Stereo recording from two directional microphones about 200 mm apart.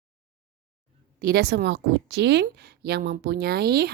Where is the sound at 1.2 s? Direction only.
55° right (ahead or behind).